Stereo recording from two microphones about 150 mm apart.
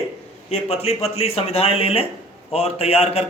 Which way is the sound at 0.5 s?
45° left (ahead or behind).